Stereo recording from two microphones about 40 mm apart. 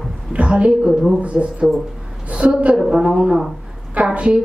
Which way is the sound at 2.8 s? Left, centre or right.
Centre.